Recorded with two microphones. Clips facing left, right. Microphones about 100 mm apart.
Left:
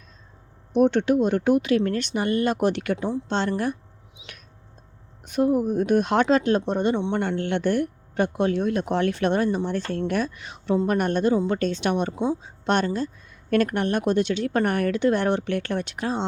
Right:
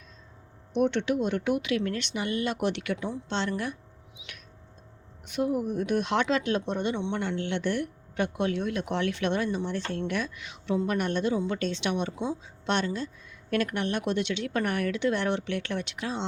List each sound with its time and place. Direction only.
0.7 s speech: 40° left (ahead or behind)
5.2 s speech: 40° left (ahead or behind)